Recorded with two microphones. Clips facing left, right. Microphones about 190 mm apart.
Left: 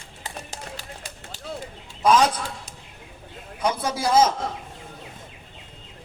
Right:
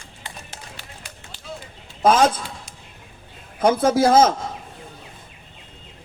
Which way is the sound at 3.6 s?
50° right (ahead or behind).